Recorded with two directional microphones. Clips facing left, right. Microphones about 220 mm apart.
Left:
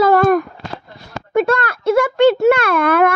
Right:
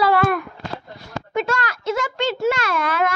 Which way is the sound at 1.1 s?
60° left (ahead or behind).